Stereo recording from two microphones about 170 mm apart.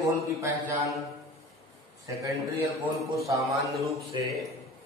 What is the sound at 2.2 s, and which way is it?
Speech, 15° right (ahead or behind).